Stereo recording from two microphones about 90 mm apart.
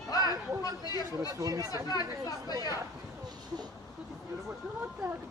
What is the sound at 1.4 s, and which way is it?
Speech, 40° right (ahead or behind).